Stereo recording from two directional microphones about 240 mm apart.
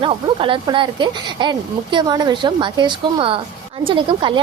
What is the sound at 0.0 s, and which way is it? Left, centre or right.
A woman's voice, right.